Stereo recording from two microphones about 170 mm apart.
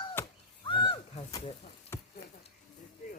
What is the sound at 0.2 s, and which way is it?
Chop, 15° left (ahead or behind).